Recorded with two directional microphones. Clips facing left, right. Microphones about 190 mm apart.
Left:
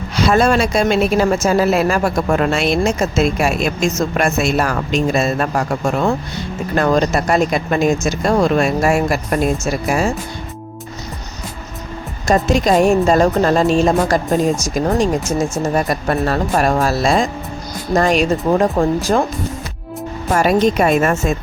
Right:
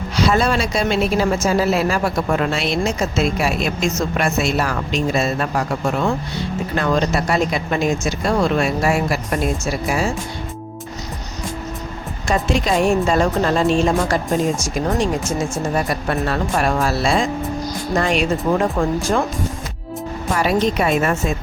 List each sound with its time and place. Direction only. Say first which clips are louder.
0.2 s a woman's voice: left 4 dB; 50° left (ahead or behind)
12.3 s a woman's voice: left 5 dB; 45° left (ahead or behind)
15.7 s speech: left 3 dB; 40° left (ahead or behind)
20.3 s a woman's voice: left 4 dB; 45° left (ahead or behind)